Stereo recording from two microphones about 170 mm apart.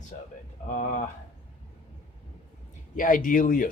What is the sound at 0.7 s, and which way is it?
Speech, 50° left (ahead or behind).